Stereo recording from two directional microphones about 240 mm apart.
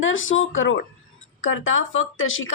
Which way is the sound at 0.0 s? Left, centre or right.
Left.